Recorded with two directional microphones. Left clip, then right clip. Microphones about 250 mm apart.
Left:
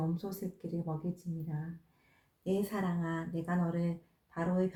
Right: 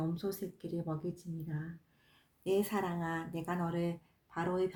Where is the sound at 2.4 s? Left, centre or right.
Right.